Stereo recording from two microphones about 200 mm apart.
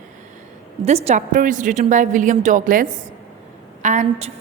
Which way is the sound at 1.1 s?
40° right (ahead or behind).